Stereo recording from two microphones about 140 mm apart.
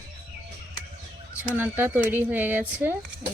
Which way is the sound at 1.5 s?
15° right (ahead or behind).